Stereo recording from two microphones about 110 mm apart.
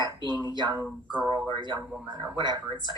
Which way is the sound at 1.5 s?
45° right (ahead or behind).